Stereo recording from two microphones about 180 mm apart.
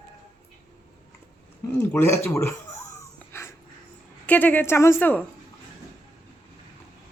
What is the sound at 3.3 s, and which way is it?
Dog, 15° left (ahead or behind).